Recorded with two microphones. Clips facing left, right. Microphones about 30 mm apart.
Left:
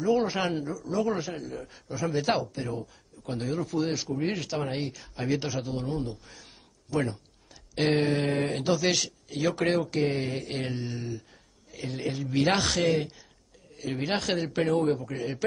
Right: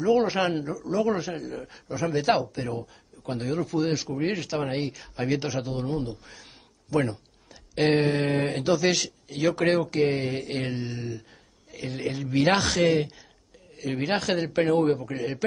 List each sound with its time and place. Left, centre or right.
0.0 s speech: centre
4.1 s speech: centre
4.4 s speech: centre